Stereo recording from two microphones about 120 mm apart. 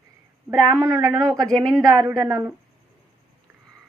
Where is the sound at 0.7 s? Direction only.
25° right (ahead or behind).